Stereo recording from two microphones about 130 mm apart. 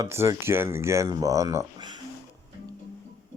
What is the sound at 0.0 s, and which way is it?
Speech, 20° right (ahead or behind).